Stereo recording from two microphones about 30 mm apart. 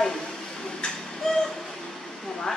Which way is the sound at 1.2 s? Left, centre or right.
Centre.